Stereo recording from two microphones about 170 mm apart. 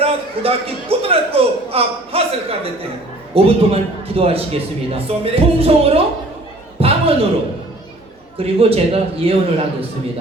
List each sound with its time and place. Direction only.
0.0 s a man's voice: 35° right (ahead or behind)
6.7 s a sound: 35° right (ahead or behind)
8.4 s a man's voice: 35° right (ahead or behind)